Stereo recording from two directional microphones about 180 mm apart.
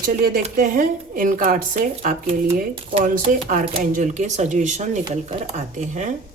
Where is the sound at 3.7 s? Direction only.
45° right (ahead or behind).